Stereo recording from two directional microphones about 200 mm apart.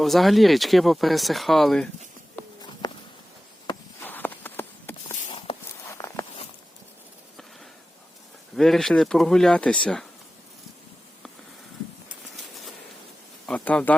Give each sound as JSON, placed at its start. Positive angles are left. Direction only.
{"t": 0.0, "sound": "speech", "side_deg": 0}
{"t": 2.8, "sound": "a sound", "side_deg": 20}
{"t": 4.0, "sound": "a sound", "side_deg": 10}
{"t": 5.9, "sound": "walk", "side_deg": 15}
{"t": 8.5, "sound": "speech", "side_deg": 0}
{"t": 13.5, "sound": "speech", "side_deg": 5}